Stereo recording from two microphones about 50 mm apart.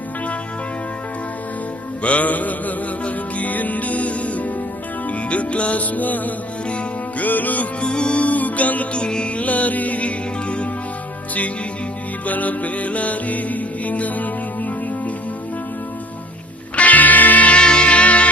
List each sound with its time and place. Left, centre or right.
2.0 s music: left
6.7 s music: left
7.3 s music: left
7.9 s music: centre
9.0 s music: centre
9.4 s music: left
12.2 s music: left
16.7 s music: left